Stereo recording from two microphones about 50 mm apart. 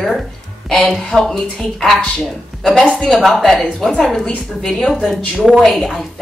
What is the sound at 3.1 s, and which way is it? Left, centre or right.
A woman's voice, centre.